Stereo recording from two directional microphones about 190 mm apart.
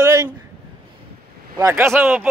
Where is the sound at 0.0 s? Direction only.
15° right (ahead or behind).